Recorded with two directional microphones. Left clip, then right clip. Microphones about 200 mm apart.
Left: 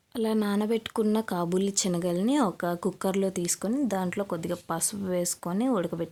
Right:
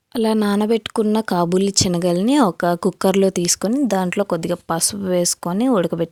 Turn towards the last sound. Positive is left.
turn(degrees=-45)  # may be behind; listen again after turning